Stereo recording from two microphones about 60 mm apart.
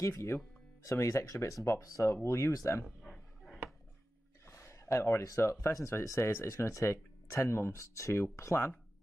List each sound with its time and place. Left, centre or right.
0.0 s speech: left
2.2 s speech: left
2.8 s a sound: centre
4.5 s a sound: left
5.2 s speech: left
5.9 s speech: left
8.1 s speech: left